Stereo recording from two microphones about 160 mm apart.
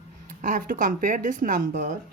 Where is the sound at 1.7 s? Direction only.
65° right (ahead or behind).